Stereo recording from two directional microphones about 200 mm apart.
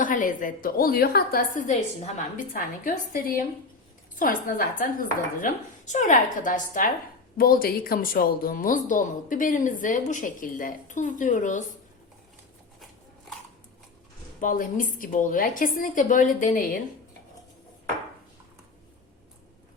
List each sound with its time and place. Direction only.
0.0 s a woman's voice: 40° left (ahead or behind)
14.4 s a woman's voice: 40° left (ahead or behind)